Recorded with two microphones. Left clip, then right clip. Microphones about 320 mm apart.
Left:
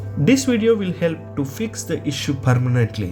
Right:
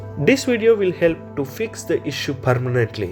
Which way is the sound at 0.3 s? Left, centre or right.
Centre.